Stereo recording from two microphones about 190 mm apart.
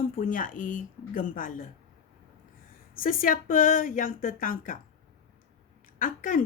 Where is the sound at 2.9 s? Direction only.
50° left (ahead or behind).